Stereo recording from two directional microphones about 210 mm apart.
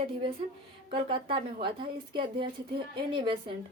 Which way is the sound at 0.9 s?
25° right (ahead or behind).